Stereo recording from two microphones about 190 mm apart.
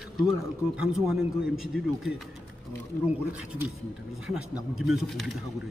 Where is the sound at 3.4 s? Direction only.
5° right (ahead or behind).